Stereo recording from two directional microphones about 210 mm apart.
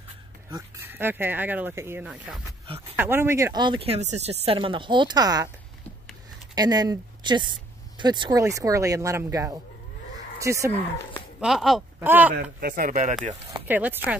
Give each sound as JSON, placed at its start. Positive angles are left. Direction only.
{"t": 0.5, "sound": "speech", "side_deg": -15}
{"t": 6.5, "sound": "speech", "side_deg": -20}
{"t": 11.3, "sound": "speech", "side_deg": 0}
{"t": 12.4, "sound": "speech", "side_deg": -45}
{"t": 13.7, "sound": "speech", "side_deg": -10}